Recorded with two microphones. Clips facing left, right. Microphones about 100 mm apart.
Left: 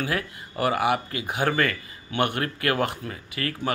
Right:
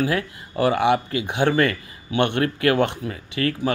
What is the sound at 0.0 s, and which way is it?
Speech, 25° right (ahead or behind).